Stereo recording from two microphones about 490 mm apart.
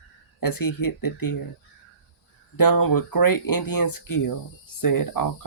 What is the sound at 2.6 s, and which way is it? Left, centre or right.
Speech, left.